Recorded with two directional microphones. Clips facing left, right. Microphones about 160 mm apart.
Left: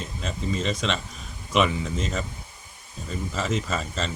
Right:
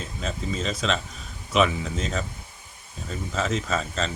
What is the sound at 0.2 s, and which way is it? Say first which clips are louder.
Speech: left 1 dB; centre (ahead or behind).